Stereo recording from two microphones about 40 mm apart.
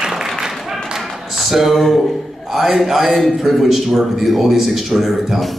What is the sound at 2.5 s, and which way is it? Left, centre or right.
A man's voice, centre.